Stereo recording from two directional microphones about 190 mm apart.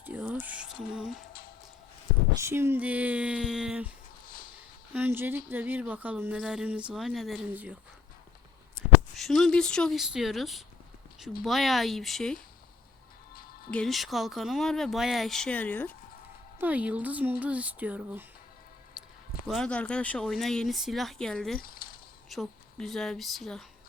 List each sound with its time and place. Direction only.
0.0 s a sound: 10° right (ahead or behind)
2.4 s speech: 10° right (ahead or behind)
4.9 s speech: 10° right (ahead or behind)
9.1 s speech: centre (ahead or behind)
13.7 s speech: 5° left (ahead or behind)
16.6 s speech: 10° right (ahead or behind)
19.5 s speech: 5° left (ahead or behind)
21.6 s a sound: 50° left (ahead or behind)
22.3 s speech: centre (ahead or behind)